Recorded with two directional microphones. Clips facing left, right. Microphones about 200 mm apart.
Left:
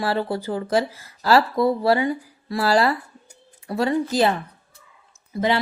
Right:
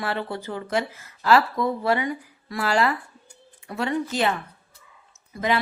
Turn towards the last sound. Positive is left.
turn(degrees=30)  # may be behind; listen again after turning